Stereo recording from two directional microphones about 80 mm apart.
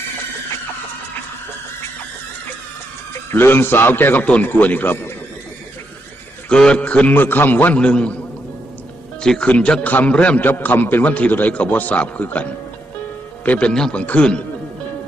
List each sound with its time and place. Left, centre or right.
3.3 s a man's voice: left
6.5 s a man's voice: centre
9.2 s a man's voice: centre